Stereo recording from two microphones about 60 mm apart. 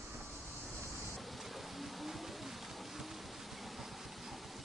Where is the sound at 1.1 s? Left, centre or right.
Centre.